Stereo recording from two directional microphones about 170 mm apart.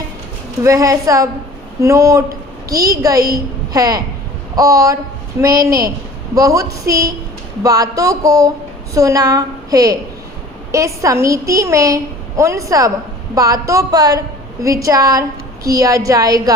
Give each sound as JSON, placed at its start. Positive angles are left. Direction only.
{"t": 0.6, "sound": "a woman's voice", "side_deg": -20}